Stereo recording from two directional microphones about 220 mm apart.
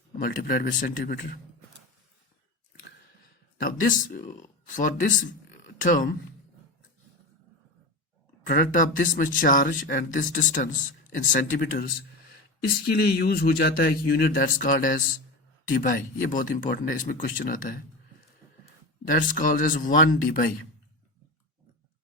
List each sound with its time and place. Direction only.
0.2 s a man's voice: 40° left (ahead or behind)
3.6 s speech: 40° left (ahead or behind)
8.4 s a man's voice: 40° left (ahead or behind)
19.0 s a man's voice: 40° left (ahead or behind)